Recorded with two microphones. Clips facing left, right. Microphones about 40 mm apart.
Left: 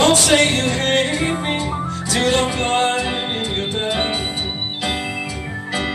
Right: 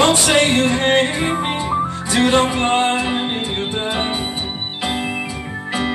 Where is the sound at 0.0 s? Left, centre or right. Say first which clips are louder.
Even; right.